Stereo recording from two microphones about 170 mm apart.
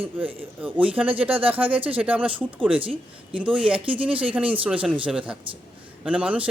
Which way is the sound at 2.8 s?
30° right (ahead or behind).